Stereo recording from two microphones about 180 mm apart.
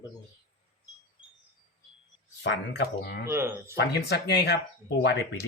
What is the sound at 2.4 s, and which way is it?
Speech, 70° left (ahead or behind).